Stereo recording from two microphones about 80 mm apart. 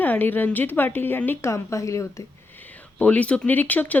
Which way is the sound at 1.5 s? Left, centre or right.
Left.